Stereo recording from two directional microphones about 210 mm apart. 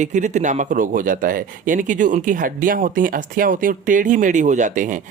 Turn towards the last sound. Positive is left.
turn(degrees=-35)  # may be behind; listen again after turning